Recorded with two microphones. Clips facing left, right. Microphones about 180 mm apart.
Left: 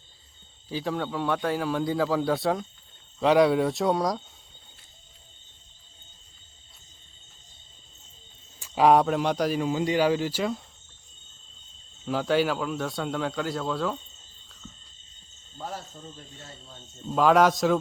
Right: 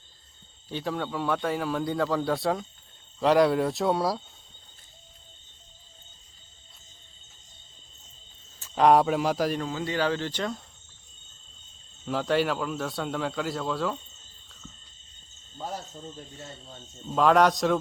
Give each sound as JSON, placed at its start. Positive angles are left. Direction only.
{"t": 0.7, "sound": "a man's voice", "side_deg": 0}
{"t": 8.5, "sound": "speech", "side_deg": 10}
{"t": 9.6, "sound": "speech", "side_deg": 15}
{"t": 12.0, "sound": "a man's voice", "side_deg": 0}
{"t": 15.5, "sound": "speech", "side_deg": -10}
{"t": 17.1, "sound": "a man's voice", "side_deg": 0}